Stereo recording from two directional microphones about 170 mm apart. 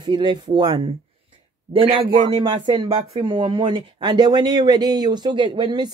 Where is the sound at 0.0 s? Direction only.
25° right (ahead or behind).